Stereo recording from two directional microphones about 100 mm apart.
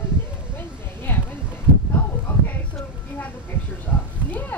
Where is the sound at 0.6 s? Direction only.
20° left (ahead or behind).